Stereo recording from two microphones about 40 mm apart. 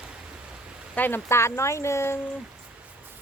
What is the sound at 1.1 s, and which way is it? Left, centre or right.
Speech, left.